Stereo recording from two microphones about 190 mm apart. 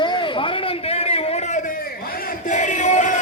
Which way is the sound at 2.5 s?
40° left (ahead or behind).